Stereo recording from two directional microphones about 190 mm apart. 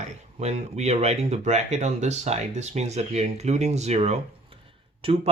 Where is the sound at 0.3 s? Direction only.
35° right (ahead or behind).